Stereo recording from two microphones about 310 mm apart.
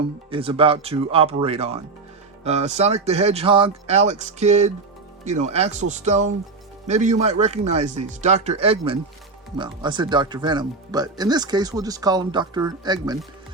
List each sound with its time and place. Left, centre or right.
0.3 s speech: centre